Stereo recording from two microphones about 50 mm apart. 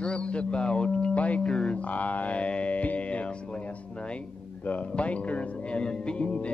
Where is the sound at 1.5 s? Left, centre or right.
Centre.